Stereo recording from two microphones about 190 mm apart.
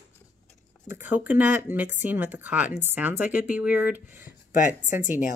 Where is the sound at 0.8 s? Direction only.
10° right (ahead or behind).